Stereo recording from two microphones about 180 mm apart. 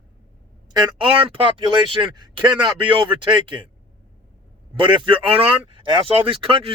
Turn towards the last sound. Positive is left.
turn(degrees=-30)  # may be behind; listen again after turning